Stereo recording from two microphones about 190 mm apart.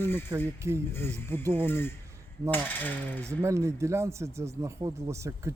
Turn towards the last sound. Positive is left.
turn(degrees=-15)  # may be behind; listen again after turning